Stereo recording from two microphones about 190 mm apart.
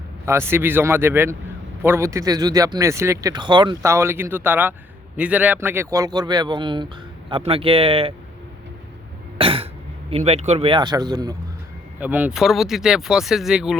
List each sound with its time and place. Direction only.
0.3 s speech: 10° right (ahead or behind); by 8.1 s 30° right (ahead or behind)
9.4 s cough: 30° right (ahead or behind)
10.1 s speech: 30° right (ahead or behind)
11.9 s speech: 10° right (ahead or behind)